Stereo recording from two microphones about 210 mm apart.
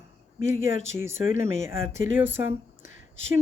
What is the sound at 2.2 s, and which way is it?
Speech, 10° right (ahead or behind).